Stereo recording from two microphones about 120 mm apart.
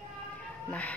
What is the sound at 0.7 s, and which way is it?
Speech, 10° left (ahead or behind).